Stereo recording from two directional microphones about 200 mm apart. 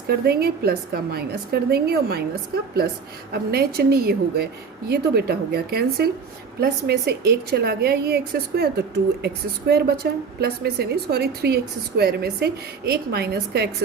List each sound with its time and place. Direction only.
0.1 s a woman's voice: 50° right (ahead or behind)
3.3 s a woman's voice: 50° right (ahead or behind)